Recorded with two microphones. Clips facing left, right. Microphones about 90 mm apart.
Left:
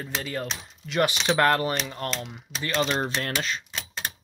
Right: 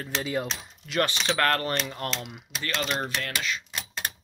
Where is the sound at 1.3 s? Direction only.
15° left (ahead or behind).